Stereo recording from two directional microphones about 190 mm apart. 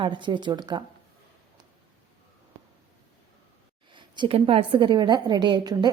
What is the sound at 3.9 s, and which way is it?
A woman's voice, 25° right (ahead or behind).